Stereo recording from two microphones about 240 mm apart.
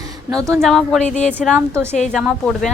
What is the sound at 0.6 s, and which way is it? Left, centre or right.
Speech, centre.